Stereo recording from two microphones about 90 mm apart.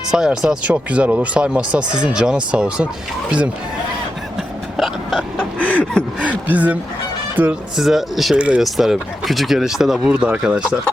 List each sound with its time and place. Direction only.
0.1 s speech: 5° right (ahead or behind)
4.8 s a sound: centre (ahead or behind)
5.6 s a sound: 10° left (ahead or behind)
6.5 s speech: 15° right (ahead or behind)
7.8 s speech: 5° right (ahead or behind)
8.4 s speech: 10° right (ahead or behind)
8.6 s speech: centre (ahead or behind)